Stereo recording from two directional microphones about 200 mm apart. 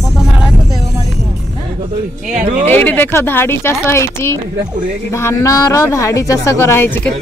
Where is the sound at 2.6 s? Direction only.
10° left (ahead or behind).